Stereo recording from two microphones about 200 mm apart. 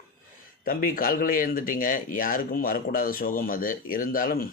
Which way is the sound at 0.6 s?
45° left (ahead or behind).